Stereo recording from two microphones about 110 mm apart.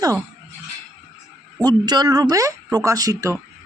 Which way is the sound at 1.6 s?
40° right (ahead or behind).